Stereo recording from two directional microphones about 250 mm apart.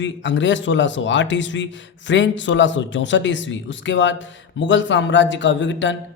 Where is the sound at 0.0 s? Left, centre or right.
Left.